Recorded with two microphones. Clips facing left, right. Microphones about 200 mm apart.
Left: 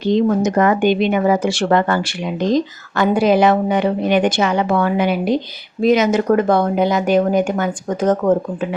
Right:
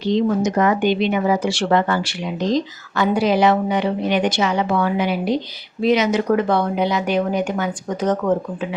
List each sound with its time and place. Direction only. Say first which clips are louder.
0.0 s speech: left 3 dB; 50° left (ahead or behind)